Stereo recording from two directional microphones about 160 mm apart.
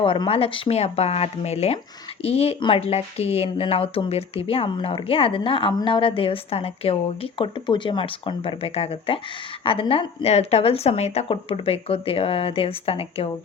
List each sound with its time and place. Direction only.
0.0 s speech: 35° left (ahead or behind)